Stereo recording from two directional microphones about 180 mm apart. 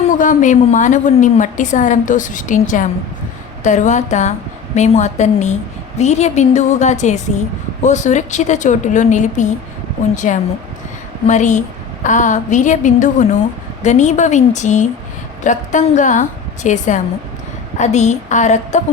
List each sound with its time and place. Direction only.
0.1 s a woman's voice: 45° left (ahead or behind)